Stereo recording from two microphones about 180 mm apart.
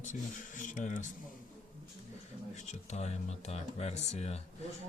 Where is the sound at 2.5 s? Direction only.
40° left (ahead or behind).